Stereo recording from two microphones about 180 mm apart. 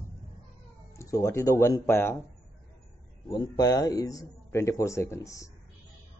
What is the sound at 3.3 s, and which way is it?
Speech, 20° left (ahead or behind).